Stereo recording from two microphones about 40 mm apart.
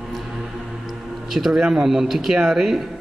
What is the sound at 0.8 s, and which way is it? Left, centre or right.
Music, centre.